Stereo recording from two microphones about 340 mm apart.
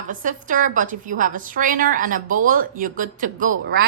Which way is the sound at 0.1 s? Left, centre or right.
Right.